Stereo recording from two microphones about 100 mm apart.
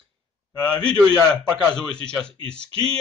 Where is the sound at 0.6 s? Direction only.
10° left (ahead or behind).